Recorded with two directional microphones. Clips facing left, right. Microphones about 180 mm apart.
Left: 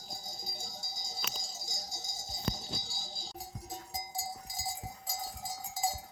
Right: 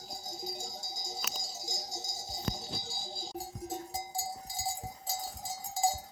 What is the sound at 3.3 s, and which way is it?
Cowbell, 30° right (ahead or behind).